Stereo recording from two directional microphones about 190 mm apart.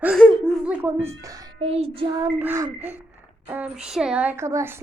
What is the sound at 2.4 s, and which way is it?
A woman's voice, 15° right (ahead or behind).